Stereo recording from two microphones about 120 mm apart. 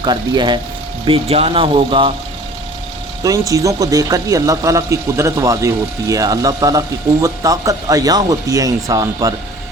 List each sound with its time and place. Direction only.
0.0 s speech: 40° right (ahead or behind)
1.0 s speech: 55° right (ahead or behind)
3.2 s speech: 30° right (ahead or behind)